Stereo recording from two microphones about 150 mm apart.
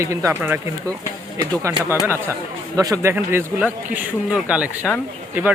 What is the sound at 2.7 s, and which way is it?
Speech, 25° right (ahead or behind).